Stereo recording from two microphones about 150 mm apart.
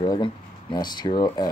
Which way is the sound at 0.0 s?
30° left (ahead or behind).